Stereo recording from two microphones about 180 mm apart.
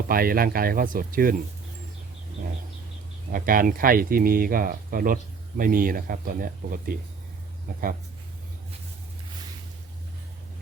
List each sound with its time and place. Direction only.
0.1 s speech: 55° right (ahead or behind)
3.3 s speech: 50° right (ahead or behind)